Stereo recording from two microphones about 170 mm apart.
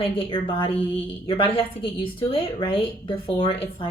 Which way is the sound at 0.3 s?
30° left (ahead or behind).